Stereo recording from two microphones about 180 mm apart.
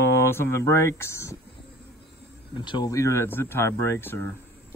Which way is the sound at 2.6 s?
25° left (ahead or behind).